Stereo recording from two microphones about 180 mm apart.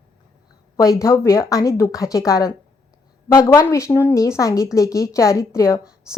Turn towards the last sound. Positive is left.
turn(degrees=15)  # may be behind; listen again after turning